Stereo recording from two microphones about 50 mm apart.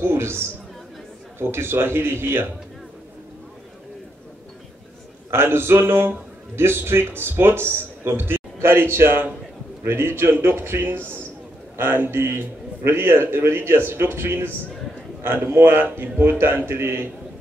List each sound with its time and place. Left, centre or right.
0.0 s a man's voice: right
5.3 s a man's voice: right